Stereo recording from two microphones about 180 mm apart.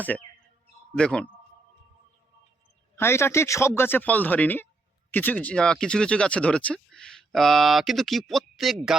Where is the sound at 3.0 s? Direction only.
15° left (ahead or behind).